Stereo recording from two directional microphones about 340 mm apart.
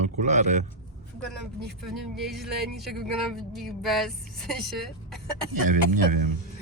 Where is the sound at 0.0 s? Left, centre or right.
Right.